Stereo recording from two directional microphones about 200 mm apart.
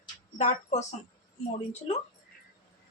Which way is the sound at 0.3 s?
35° left (ahead or behind).